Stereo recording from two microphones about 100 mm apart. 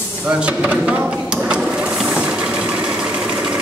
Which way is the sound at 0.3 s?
10° right (ahead or behind).